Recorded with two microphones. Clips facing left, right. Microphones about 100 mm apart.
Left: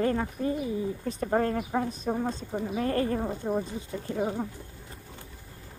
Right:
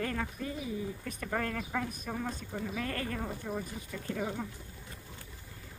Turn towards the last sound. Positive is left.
turn(degrees=25)  # may be behind; listen again after turning